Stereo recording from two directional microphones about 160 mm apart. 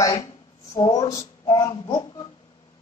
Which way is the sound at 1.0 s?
25° left (ahead or behind).